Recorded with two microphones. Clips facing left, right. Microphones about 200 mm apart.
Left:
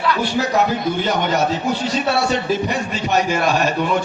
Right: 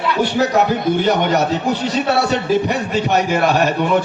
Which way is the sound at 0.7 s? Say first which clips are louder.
Right 4 dB; 60° right (ahead or behind).